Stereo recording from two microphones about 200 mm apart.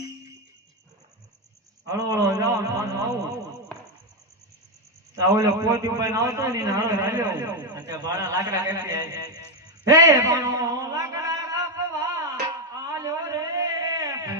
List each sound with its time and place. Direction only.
1.9 s a man's voice: 15° right (ahead or behind)
5.1 s a man's voice: 15° right (ahead or behind)
12.7 s a sound: 15° right (ahead or behind)